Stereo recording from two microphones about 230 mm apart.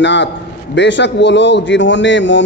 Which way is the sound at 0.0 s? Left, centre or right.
Left.